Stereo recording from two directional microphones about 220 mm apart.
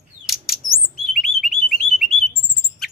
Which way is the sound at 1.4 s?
Centre (ahead or behind).